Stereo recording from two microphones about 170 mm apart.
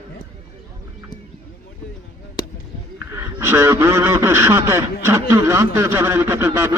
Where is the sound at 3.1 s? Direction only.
15° right (ahead or behind).